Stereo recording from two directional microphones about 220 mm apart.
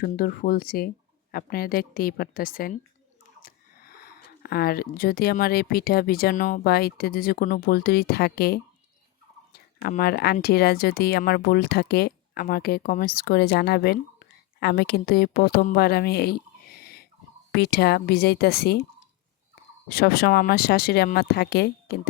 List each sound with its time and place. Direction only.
0.0 s speech: 40° left (ahead or behind)
19.9 s speech: 45° left (ahead or behind)